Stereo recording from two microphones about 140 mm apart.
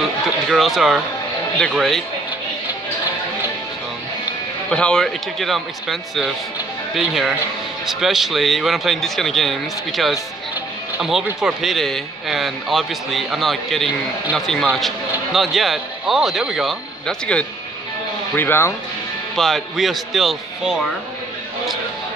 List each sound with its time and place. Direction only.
0.5 s a man's voice: centre (ahead or behind)
4.6 s a man's voice: 5° left (ahead or behind)
19.3 s a man's voice: centre (ahead or behind)